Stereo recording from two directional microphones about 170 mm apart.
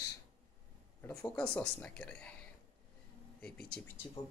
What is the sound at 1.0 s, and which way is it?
Speech, 10° left (ahead or behind).